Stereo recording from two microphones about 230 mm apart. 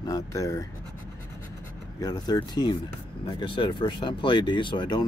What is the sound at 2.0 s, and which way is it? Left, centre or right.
Speech, centre.